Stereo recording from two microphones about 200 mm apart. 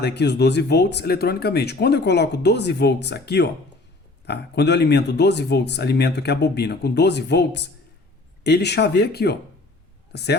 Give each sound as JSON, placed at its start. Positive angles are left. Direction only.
{"t": 0.0, "sound": "speech", "side_deg": 55}